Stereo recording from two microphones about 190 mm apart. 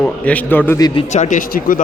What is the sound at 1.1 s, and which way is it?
Speech, 40° left (ahead or behind).